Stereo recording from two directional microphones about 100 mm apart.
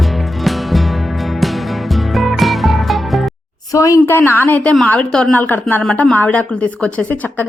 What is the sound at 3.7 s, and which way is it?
Speech, 35° left (ahead or behind).